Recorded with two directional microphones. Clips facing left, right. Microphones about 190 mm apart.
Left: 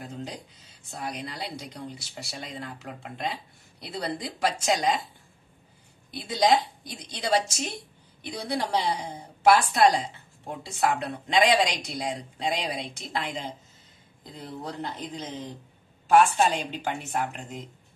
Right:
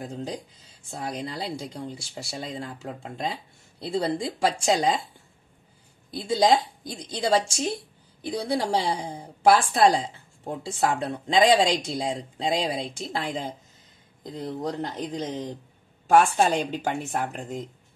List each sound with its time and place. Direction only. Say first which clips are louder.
0.0 s a woman's voice: right 4 dB; 40° right (ahead or behind)
0.8 s speech: right 3 dB; 30° right (ahead or behind)
7.4 s a woman's voice: right 6 dB; 30° right (ahead or behind)
14.2 s a woman's voice: right 7 dB; 45° right (ahead or behind)